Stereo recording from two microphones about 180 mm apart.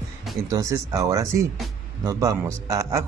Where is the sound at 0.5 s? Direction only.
20° right (ahead or behind).